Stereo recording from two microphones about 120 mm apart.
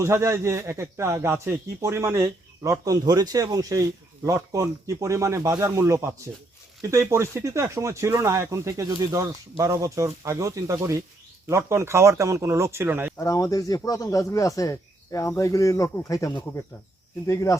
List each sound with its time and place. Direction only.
0.0 s a man's voice: 25° right (ahead or behind)
13.1 s speech: 25° left (ahead or behind)